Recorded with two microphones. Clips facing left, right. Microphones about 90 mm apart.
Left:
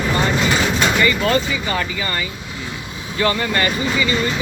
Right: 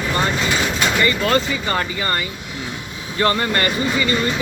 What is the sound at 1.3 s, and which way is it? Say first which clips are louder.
Speech: even; 40° right (ahead or behind).